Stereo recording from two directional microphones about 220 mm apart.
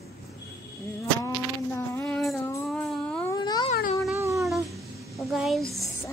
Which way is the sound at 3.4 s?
20° left (ahead or behind).